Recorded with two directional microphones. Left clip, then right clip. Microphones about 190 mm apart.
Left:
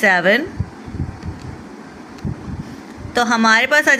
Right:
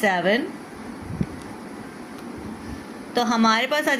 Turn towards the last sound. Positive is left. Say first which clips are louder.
# left 7 dB
turn(degrees=25)  # may be behind; listen again after turning